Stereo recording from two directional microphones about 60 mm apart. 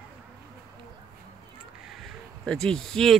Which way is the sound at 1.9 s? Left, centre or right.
Centre.